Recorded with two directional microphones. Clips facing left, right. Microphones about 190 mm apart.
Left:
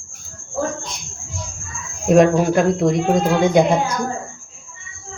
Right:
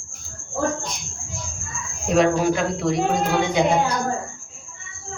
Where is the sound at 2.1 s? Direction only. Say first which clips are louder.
Left 5 dB; 50° left (ahead or behind).